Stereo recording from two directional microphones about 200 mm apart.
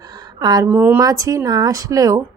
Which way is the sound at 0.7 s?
10° right (ahead or behind).